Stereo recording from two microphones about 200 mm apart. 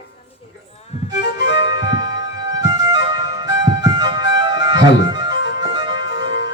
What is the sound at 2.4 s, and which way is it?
Flute, 20° right (ahead or behind).